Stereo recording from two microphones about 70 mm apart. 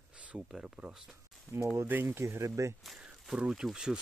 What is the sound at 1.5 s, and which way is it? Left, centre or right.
Speech, left.